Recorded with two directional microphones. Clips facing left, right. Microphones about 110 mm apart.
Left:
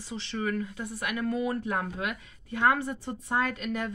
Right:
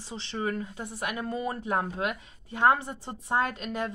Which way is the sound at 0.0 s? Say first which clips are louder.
Even; 25° right (ahead or behind).